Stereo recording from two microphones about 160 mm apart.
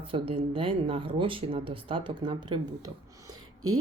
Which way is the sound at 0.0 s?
35° right (ahead or behind).